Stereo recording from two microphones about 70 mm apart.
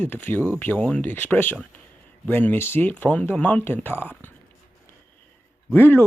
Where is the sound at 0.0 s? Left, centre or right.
Left.